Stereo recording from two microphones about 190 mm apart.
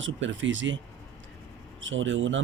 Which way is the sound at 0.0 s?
80° right.